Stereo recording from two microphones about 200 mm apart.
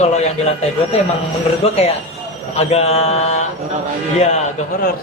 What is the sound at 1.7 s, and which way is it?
Speech, 30° left (ahead or behind).